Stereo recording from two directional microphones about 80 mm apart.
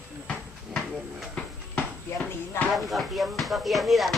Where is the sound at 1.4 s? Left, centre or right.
Centre.